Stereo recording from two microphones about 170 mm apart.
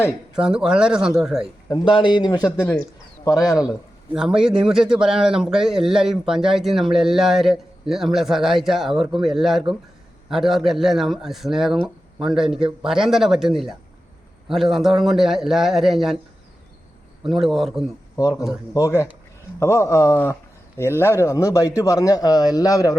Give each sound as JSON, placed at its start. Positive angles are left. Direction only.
{"t": 0.3, "sound": "speech", "side_deg": -5}
{"t": 1.7, "sound": "a man's voice", "side_deg": 25}
{"t": 4.1, "sound": "speech", "side_deg": -5}
{"t": 17.2, "sound": "speech", "side_deg": 0}
{"t": 18.2, "sound": "a man's voice", "side_deg": 20}